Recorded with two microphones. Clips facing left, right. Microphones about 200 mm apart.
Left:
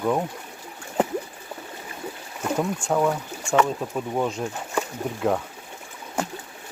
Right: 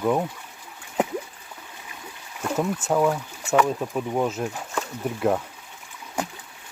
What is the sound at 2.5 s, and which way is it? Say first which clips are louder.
Speech: right 1 dB; centre (ahead or behind).